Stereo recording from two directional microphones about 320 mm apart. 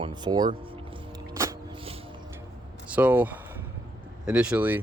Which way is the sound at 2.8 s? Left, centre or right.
Centre.